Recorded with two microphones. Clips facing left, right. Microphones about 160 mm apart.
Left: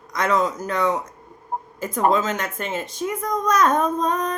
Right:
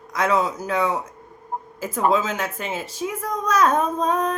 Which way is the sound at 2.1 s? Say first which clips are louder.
Even; 5° right (ahead or behind).